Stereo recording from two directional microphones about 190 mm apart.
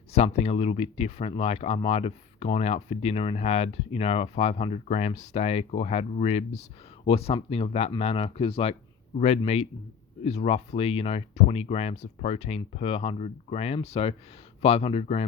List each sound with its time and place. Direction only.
0.1 s speech: 35° left (ahead or behind)